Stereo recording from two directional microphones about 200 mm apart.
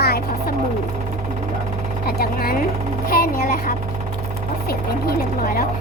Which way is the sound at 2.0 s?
50° left (ahead or behind).